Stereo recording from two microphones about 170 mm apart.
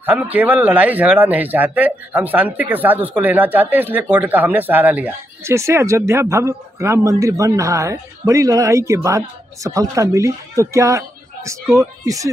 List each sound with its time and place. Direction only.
0.0 s speech: 10° right (ahead or behind)